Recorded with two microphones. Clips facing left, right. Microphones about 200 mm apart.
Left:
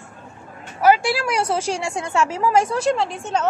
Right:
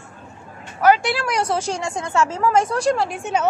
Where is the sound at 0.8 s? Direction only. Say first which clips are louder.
Even; 5° left (ahead or behind).